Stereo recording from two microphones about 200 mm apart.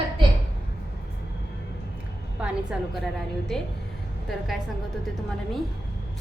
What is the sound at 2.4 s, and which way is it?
A woman's voice, 5° right (ahead or behind).